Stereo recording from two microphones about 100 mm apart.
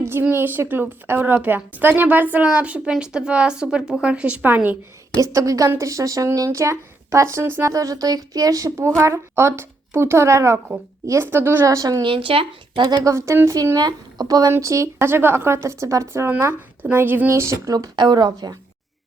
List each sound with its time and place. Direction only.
0.0 s a woman's voice: 25° right (ahead or behind)
5.1 s a woman's voice: 35° right (ahead or behind)
7.7 s a woman's voice: 35° right (ahead or behind)
12.0 s speech: 60° right (ahead or behind)
12.9 s a woman's voice: 40° right (ahead or behind)
13.1 s a woman's voice: 25° right (ahead or behind)
13.7 s a woman's voice: 45° right (ahead or behind)